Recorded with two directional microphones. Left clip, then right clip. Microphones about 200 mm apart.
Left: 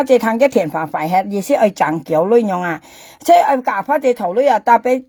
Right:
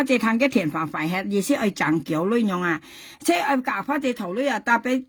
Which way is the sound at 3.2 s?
25° right (ahead or behind).